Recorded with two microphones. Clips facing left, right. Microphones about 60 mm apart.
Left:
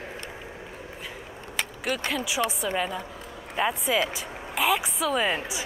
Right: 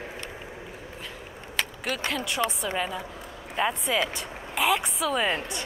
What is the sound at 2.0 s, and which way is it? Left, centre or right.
Speech, centre.